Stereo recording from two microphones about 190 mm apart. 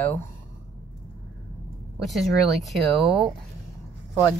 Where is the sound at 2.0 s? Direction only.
Centre (ahead or behind).